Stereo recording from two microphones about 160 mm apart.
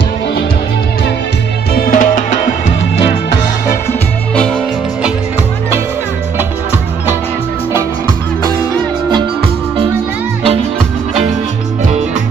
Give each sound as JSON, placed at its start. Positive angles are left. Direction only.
{"t": 1.7, "sound": "music", "side_deg": 65}